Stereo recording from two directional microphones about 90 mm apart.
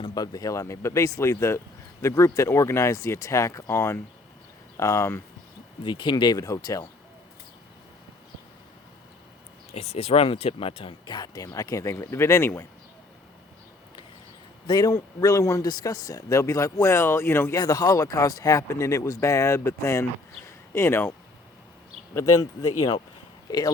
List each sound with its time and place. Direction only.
0.0 s speech: 50° left (ahead or behind); by 5.2 s 30° left (ahead or behind)
5.8 s speech: 60° left (ahead or behind); by 6.8 s 40° left (ahead or behind)
10.2 s speech: 90° left
11.1 s speech: 45° left (ahead or behind); by 12.6 s 30° left (ahead or behind)
14.7 s speech: 45° left (ahead or behind)
14.9 s speech: 35° left (ahead or behind)
17.5 s speech: 45° left (ahead or behind); by 21.2 s 25° left (ahead or behind)
22.1 s speech: 40° left (ahead or behind)